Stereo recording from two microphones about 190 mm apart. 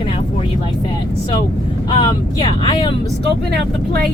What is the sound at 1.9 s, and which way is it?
Speech, 25° left (ahead or behind).